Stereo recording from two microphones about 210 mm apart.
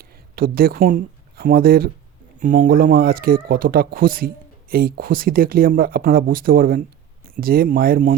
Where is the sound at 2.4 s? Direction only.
40° right (ahead or behind).